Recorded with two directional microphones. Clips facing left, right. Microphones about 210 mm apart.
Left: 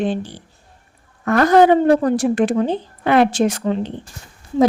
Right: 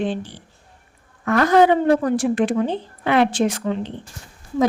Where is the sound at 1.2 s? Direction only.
40° left (ahead or behind).